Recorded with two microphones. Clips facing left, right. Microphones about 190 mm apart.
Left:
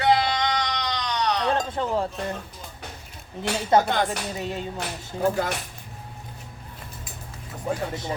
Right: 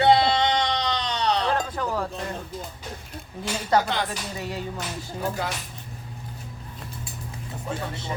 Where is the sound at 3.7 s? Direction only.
25° left (ahead or behind).